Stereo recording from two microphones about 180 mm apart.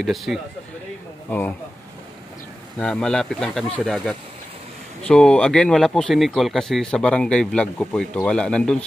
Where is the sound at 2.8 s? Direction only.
5° left (ahead or behind).